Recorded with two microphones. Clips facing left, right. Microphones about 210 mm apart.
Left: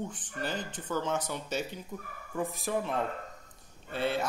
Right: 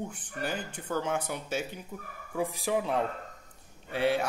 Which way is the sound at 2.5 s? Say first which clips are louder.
Right 3 dB; 90° right.